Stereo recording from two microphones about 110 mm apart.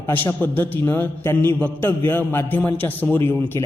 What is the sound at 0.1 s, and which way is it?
A man's voice, 20° left (ahead or behind).